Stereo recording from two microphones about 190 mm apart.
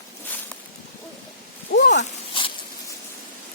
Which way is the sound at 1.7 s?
65° left (ahead or behind).